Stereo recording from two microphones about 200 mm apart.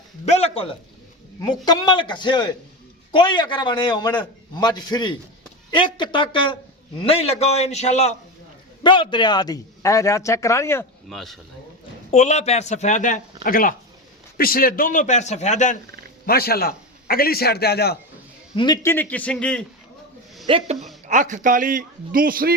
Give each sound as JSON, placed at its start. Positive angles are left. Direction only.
{"t": 0.3, "sound": "a sound", "side_deg": 30}
{"t": 1.4, "sound": "a man's voice", "side_deg": 20}
{"t": 8.8, "sound": "a man's voice", "side_deg": 25}
{"t": 11.1, "sound": "speech", "side_deg": 0}
{"t": 12.1, "sound": "speech", "side_deg": 35}
{"t": 16.2, "sound": "a man's voice", "side_deg": 50}
{"t": 18.5, "sound": "a man's voice", "side_deg": 20}
{"t": 20.5, "sound": "a man's voice", "side_deg": -30}